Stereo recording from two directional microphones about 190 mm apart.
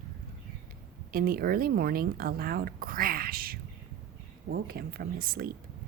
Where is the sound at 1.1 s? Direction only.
50° right (ahead or behind).